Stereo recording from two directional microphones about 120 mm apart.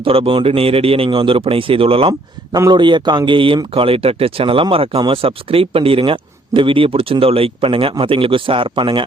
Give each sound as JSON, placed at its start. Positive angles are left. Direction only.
{"t": 0.0, "sound": "a man's voice", "side_deg": -50}
{"t": 2.6, "sound": "a man's voice", "side_deg": -40}